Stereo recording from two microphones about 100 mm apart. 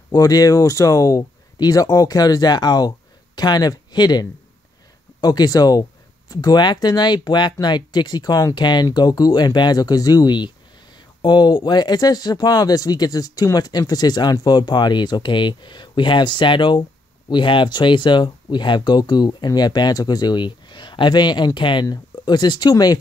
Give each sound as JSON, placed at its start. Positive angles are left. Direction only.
{"t": 0.1, "sound": "speech", "side_deg": 40}